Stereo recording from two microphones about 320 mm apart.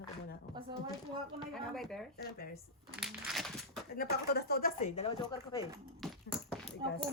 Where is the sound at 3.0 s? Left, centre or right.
Centre.